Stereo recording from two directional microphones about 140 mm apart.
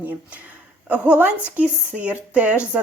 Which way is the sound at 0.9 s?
10° right (ahead or behind).